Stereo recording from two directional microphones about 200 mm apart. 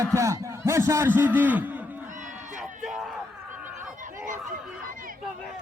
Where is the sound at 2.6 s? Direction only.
Centre (ahead or behind).